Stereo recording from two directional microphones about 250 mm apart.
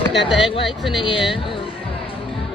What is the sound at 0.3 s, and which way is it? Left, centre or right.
Speech, centre.